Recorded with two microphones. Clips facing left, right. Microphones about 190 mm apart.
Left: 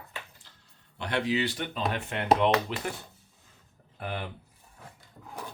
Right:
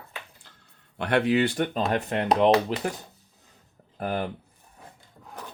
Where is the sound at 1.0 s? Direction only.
55° right (ahead or behind); by 2.7 s 40° right (ahead or behind).